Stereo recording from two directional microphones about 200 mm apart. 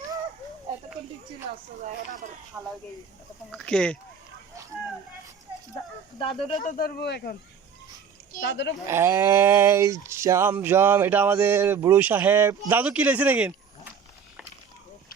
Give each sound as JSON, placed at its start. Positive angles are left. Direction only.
{"t": 2.5, "sound": "speech", "side_deg": -15}
{"t": 3.5, "sound": "speech", "side_deg": 5}
{"t": 6.1, "sound": "speech", "side_deg": 25}
{"t": 6.6, "sound": "speech", "side_deg": 40}
{"t": 8.4, "sound": "speech", "side_deg": 60}
{"t": 8.9, "sound": "speech", "side_deg": -10}